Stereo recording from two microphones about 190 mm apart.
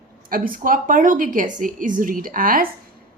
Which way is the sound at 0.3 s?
50° right (ahead or behind).